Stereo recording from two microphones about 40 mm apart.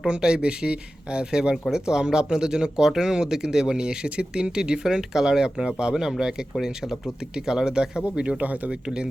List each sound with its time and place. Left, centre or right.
0.2 s speech: right